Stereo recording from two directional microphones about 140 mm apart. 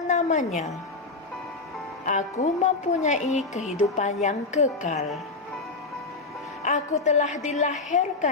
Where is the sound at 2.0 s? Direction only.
65° left (ahead or behind).